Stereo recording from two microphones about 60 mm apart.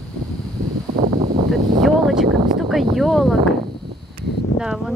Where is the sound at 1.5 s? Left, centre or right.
Centre.